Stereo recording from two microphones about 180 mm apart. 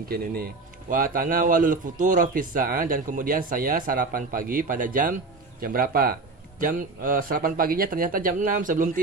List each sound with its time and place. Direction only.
0.1 s a man's voice: 55° right (ahead or behind)